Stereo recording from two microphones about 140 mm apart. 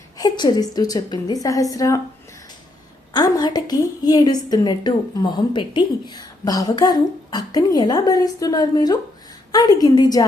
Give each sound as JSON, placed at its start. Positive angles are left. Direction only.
{"t": 0.2, "sound": "a woman's voice", "side_deg": 30}
{"t": 3.1, "sound": "a woman's voice", "side_deg": 30}